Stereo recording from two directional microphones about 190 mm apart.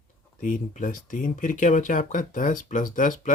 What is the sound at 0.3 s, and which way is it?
Speech, 40° left (ahead or behind).